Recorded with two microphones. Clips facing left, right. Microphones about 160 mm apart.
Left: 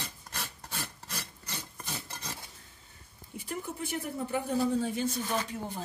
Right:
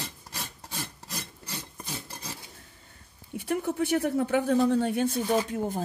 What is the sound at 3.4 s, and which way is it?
Speech, 70° right (ahead or behind).